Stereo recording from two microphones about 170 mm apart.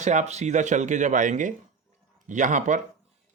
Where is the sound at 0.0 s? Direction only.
45° right (ahead or behind).